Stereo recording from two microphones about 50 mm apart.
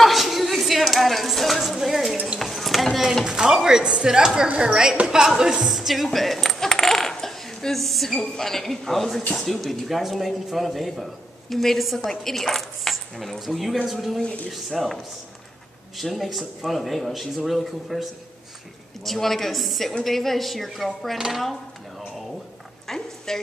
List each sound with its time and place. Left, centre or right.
0.0 s a sound: centre
2.3 s clip-clop: centre
3.3 s a woman's voice: centre
14.2 s speech: left
14.7 s speech: centre
16.0 s speech: centre
19.0 s speech: centre
22.8 s a woman's voice: centre